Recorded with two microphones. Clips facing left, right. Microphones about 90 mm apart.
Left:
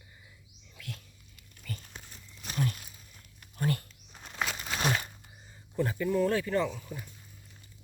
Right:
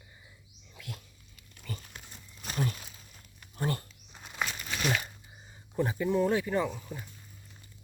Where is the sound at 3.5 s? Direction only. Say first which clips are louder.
Left 1 dB; 30° right (ahead or behind).